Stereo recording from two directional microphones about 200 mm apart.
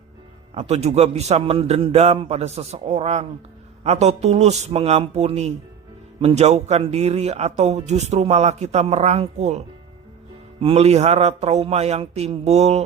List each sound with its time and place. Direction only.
0.5 s speech: 35° right (ahead or behind)